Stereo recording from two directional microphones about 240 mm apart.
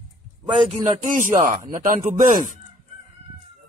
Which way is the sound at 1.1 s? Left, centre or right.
Right.